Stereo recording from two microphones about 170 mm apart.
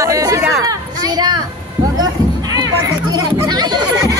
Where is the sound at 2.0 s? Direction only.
20° right (ahead or behind).